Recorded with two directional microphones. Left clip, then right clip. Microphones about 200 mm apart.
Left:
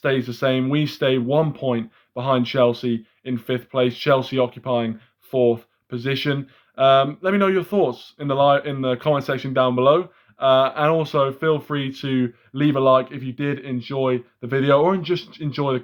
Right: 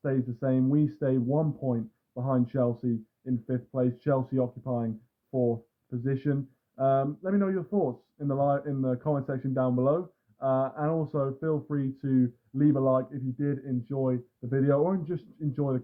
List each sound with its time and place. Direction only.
0.0 s speech: 30° left (ahead or behind)